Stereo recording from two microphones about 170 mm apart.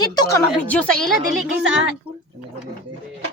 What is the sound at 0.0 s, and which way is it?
Speech, 25° left (ahead or behind).